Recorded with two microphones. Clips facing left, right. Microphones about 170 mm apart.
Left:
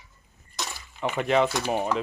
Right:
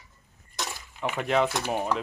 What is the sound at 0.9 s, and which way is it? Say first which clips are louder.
Speech: left 2 dB; centre (ahead or behind).